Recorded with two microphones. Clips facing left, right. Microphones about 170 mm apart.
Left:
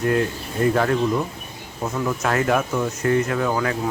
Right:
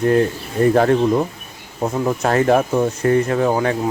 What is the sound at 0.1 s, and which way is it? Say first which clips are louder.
Speech: right 5 dB; 35° right (ahead or behind).